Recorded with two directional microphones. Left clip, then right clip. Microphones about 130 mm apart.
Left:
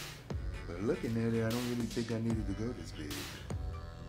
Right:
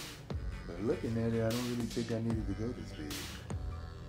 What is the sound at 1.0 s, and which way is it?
Speech, 10° left (ahead or behind).